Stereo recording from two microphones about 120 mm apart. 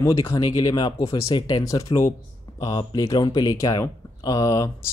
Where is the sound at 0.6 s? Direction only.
35° left (ahead or behind).